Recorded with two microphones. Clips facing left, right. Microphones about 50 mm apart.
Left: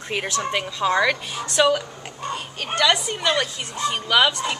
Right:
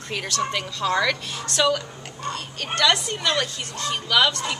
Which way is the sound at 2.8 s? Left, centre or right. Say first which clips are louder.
Left 1 dB; centre.